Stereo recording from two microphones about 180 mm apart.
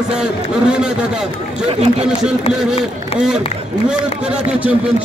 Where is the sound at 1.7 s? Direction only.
35° right (ahead or behind).